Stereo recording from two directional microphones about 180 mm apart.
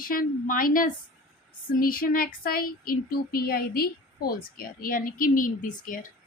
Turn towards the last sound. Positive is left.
turn(degrees=50)  # may be behind; listen again after turning